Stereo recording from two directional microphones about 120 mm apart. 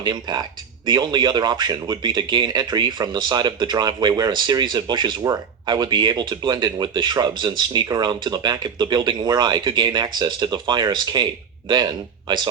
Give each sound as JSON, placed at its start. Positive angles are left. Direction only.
{"t": 0.0, "sound": "speech", "side_deg": -35}